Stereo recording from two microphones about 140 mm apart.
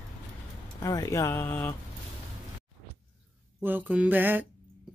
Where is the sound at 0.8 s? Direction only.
25° left (ahead or behind).